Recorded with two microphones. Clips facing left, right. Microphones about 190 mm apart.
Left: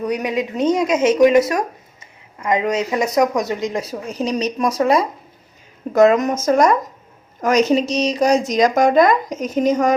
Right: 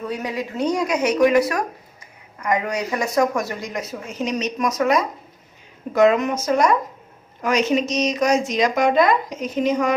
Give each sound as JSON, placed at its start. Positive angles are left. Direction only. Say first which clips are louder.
{"t": 0.0, "sound": "speech", "louder": "left 5 dB", "side_deg": 20}
{"t": 5.9, "sound": "speech", "louder": "left 3 dB", "side_deg": 45}